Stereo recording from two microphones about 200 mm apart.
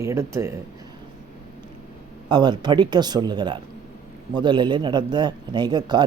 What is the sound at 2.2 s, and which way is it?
A man's voice, 20° right (ahead or behind).